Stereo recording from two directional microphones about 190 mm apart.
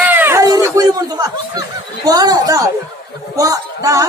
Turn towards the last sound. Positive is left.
turn(degrees=-15)  # may be behind; listen again after turning